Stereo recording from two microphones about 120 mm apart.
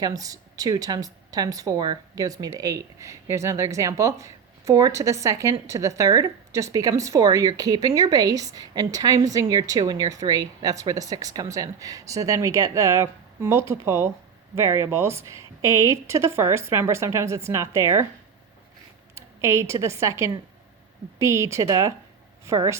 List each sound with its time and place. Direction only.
0.0 s speech: 30° right (ahead or behind)
19.1 s a woman's voice: 25° right (ahead or behind)